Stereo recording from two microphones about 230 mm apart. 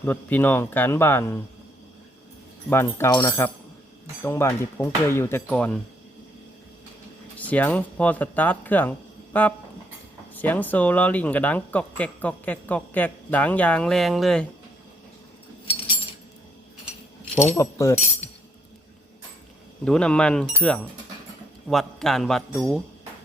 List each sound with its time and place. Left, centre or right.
0.0 s speech: centre
2.6 s speech: centre
7.3 s speech: centre
17.4 s speech: centre
19.8 s a man's voice: centre